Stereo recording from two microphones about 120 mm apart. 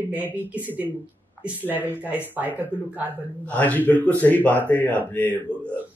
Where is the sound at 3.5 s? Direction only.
15° left (ahead or behind).